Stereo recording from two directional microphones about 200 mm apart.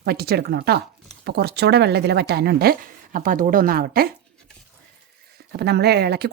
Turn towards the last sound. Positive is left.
turn(degrees=-55)  # may be behind; listen again after turning